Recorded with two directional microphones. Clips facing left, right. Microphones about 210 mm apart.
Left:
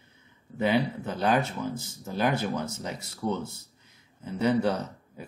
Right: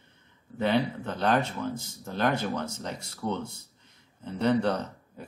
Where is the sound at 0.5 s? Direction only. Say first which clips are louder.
Left 1 dB; 10° left (ahead or behind).